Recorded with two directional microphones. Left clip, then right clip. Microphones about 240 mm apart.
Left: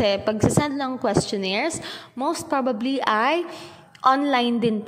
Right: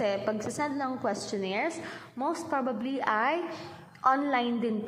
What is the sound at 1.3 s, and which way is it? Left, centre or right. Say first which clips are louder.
A woman's voice: left 6 dB; left.